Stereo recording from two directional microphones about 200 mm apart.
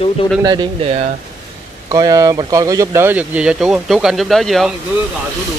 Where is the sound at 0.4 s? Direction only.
20° right (ahead or behind); by 4.7 s centre (ahead or behind).